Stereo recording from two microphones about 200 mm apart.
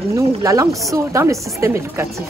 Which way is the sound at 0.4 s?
15° right (ahead or behind).